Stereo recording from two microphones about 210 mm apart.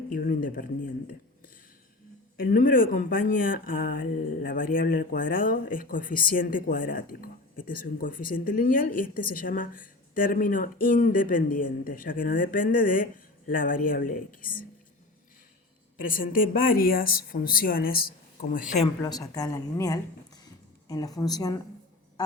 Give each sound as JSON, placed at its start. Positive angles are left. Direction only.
{"t": 0.1, "sound": "speech", "side_deg": 40}
{"t": 2.4, "sound": "speech", "side_deg": 40}
{"t": 16.0, "sound": "speech", "side_deg": 40}
{"t": 19.0, "sound": "speech", "side_deg": 15}